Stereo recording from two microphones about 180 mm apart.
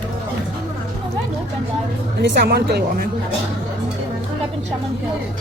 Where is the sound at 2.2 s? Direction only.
70° right (ahead or behind).